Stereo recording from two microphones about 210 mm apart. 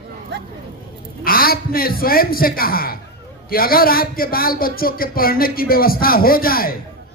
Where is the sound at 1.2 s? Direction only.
45° left (ahead or behind).